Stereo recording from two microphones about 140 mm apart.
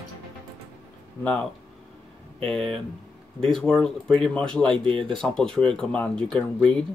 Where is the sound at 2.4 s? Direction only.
5° left (ahead or behind).